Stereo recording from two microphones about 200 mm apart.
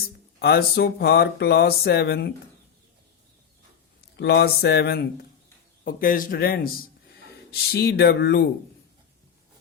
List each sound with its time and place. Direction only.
0.0 s speech: 50° left (ahead or behind)
4.2 s speech: 55° left (ahead or behind)